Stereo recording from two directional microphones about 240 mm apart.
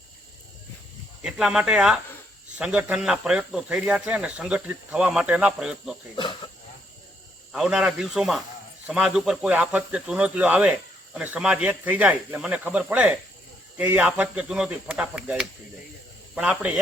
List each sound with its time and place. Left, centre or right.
1.2 s speech: centre
6.1 s cricket: left
7.5 s speech: centre